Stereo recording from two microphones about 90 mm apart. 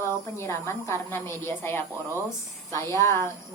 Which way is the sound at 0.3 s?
30° left (ahead or behind).